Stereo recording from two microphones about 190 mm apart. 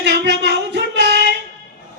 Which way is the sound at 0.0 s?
65° right (ahead or behind).